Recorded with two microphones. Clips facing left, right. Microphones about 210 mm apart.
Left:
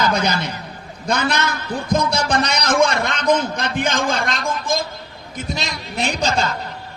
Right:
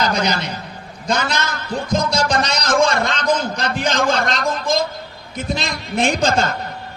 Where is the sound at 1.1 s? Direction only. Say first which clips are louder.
Left 1 dB; 60° left (ahead or behind).